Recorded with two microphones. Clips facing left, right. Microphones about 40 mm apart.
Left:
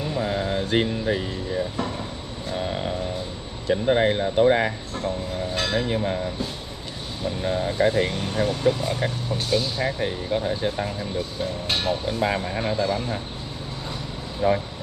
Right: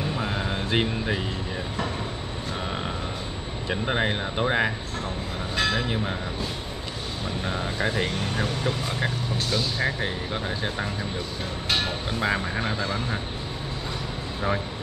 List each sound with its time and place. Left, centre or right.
0.2 s a sound: centre
3.7 s speech: centre
7.4 s speech: centre
12.1 s speech: centre
14.4 s speech: centre